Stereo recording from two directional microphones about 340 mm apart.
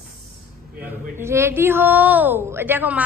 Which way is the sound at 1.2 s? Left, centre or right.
Centre.